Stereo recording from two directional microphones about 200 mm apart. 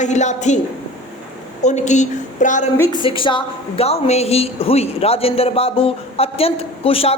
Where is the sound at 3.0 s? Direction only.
25° left (ahead or behind).